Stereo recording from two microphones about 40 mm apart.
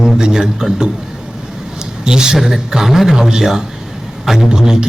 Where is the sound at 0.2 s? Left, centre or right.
Centre.